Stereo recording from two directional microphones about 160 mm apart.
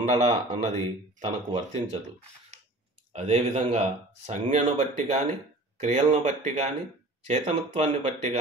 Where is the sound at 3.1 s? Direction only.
45° right (ahead or behind).